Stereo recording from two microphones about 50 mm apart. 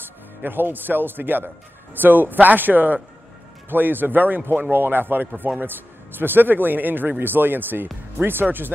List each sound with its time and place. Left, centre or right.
0.4 s a man's voice: right